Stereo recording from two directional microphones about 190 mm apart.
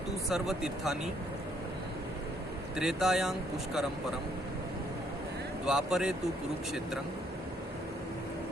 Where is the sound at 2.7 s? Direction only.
Centre (ahead or behind).